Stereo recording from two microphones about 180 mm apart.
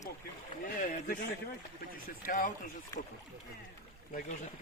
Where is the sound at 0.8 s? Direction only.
50° left (ahead or behind).